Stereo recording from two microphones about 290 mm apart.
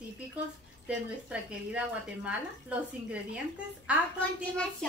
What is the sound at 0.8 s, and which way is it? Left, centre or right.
Speech, centre.